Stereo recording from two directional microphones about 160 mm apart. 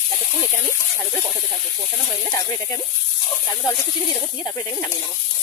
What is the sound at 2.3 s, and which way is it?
Speech, 20° left (ahead or behind).